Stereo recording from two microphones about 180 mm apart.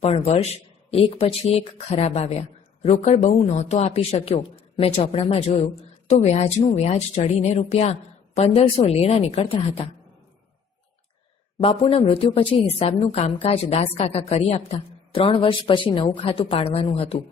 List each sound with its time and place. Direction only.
0.0 s a woman's voice: 35° left (ahead or behind)
11.6 s a woman's voice: 30° left (ahead or behind)